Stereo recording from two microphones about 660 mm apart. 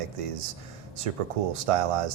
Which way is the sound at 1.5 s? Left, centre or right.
Right.